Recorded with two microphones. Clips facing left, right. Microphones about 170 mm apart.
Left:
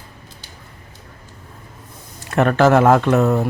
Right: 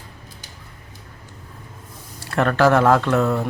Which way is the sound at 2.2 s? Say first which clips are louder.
Left 3 dB; 20° left (ahead or behind).